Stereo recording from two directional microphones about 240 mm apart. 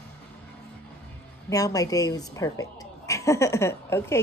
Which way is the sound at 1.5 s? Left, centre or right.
Centre.